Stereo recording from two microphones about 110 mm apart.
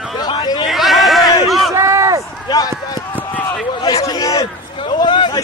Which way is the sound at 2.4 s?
35° left (ahead or behind).